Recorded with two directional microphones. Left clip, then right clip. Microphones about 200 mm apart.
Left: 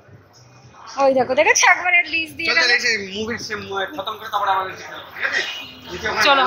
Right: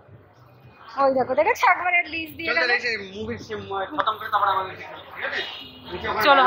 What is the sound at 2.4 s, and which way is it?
Speech, 60° left (ahead or behind).